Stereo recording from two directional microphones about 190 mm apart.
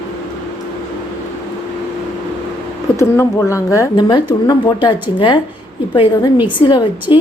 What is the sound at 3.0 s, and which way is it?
A woman's voice, 15° left (ahead or behind).